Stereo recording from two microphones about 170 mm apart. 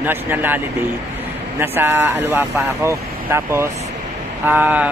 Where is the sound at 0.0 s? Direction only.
10° right (ahead or behind).